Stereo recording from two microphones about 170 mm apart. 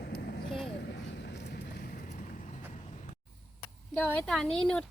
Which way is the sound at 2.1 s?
45° left (ahead or behind).